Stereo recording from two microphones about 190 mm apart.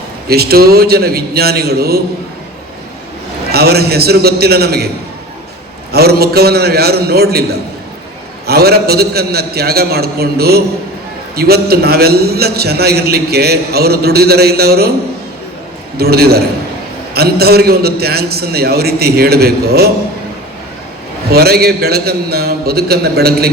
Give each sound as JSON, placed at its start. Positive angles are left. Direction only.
{"t": 0.3, "sound": "a man's voice", "side_deg": -55}
{"t": 3.5, "sound": "a man's voice", "side_deg": -55}
{"t": 5.9, "sound": "a man's voice", "side_deg": -55}
{"t": 8.4, "sound": "a man's voice", "side_deg": -55}
{"t": 16.0, "sound": "a man's voice", "side_deg": -55}
{"t": 21.2, "sound": "a man's voice", "side_deg": -55}